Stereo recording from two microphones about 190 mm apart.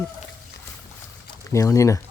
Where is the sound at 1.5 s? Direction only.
15° left (ahead or behind).